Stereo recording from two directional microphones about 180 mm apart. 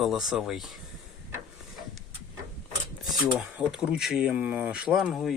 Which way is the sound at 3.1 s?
5° right (ahead or behind).